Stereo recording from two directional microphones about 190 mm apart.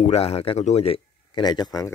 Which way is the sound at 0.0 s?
35° left (ahead or behind).